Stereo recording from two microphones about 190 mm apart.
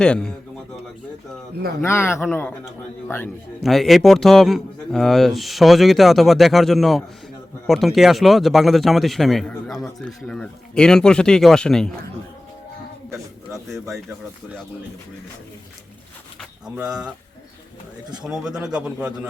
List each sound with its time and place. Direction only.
0.0 s speech: 5° left (ahead or behind)
1.8 s speech: 15° left (ahead or behind)
3.6 s speech: centre (ahead or behind)
13.1 s a sound: centre (ahead or behind)
16.4 s speech: 5° right (ahead or behind)
18.2 s speech: 5° right (ahead or behind)